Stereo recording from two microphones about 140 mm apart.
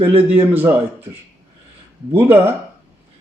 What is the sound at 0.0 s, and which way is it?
Speech, 15° right (ahead or behind).